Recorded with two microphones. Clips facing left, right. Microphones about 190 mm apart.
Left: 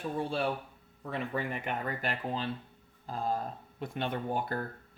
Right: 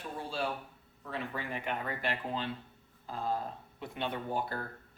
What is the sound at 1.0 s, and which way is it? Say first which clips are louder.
Speech: left 4 dB; 50° left (ahead or behind).